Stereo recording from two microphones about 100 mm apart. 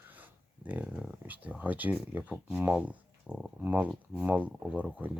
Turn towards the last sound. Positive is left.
turn(degrees=-10)  # may be behind; listen again after turning